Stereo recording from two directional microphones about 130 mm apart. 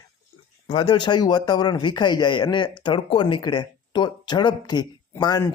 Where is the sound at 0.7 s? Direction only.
40° left (ahead or behind).